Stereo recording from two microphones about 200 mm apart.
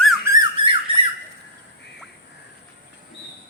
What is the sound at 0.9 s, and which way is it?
Squawk, 25° right (ahead or behind).